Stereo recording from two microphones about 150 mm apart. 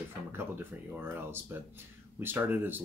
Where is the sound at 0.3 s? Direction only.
15° right (ahead or behind).